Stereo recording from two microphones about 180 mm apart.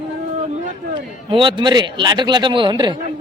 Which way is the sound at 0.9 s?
25° right (ahead or behind).